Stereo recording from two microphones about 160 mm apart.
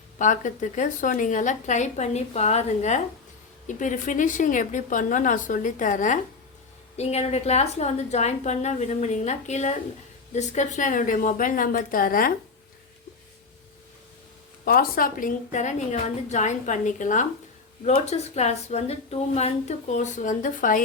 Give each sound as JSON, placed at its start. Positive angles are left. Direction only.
{"t": 0.2, "sound": "a woman's voice", "side_deg": 50}
{"t": 14.6, "sound": "speech", "side_deg": 65}